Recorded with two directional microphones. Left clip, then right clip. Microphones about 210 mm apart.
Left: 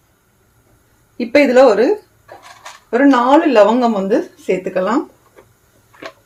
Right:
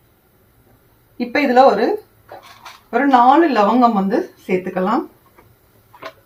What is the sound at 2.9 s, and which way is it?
Speech, 50° left (ahead or behind).